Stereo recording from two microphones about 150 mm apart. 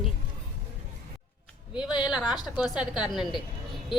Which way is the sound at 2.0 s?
5° right (ahead or behind).